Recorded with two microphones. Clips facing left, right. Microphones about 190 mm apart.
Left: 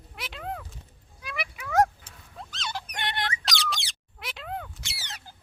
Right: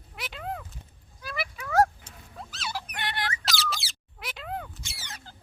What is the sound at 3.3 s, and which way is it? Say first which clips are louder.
Squeak: even; centre (ahead or behind).